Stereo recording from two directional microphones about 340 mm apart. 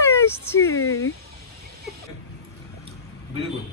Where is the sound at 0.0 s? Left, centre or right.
Centre.